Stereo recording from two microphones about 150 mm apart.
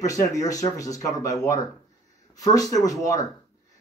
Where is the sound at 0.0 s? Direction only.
20° left (ahead or behind).